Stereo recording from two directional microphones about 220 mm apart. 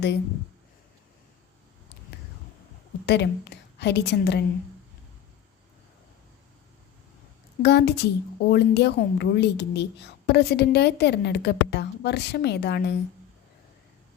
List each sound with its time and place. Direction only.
3.1 s a woman's voice: 50° left (ahead or behind)
7.6 s a woman's voice: 50° left (ahead or behind)